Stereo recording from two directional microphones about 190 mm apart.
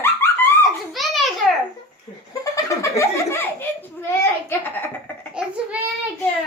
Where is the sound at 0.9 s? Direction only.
Centre (ahead or behind).